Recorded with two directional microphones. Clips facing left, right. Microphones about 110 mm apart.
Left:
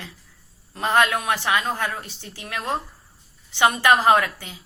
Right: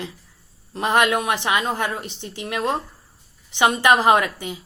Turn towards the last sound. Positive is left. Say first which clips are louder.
# right 1 dB
turn(degrees=-15)  # may be behind; listen again after turning